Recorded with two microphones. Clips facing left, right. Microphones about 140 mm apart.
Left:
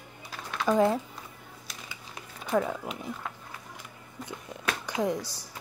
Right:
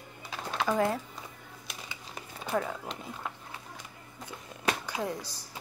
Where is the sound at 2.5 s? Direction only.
5° left (ahead or behind).